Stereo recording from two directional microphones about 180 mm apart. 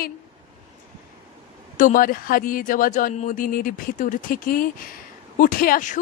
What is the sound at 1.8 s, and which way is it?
A woman's voice, 45° left (ahead or behind).